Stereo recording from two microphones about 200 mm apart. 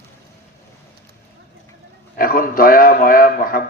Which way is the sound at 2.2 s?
45° left (ahead or behind).